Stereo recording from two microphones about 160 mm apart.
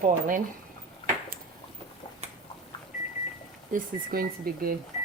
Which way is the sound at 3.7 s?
65° right (ahead or behind).